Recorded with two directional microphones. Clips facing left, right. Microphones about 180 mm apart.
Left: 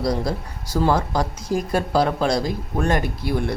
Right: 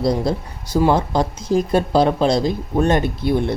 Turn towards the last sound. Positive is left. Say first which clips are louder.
# right 5 dB
turn(degrees=-25)  # may be behind; listen again after turning